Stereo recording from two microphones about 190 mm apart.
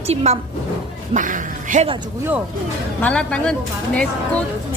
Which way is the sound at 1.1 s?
45° right (ahead or behind).